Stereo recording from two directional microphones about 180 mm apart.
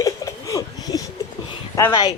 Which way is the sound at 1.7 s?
20° left (ahead or behind).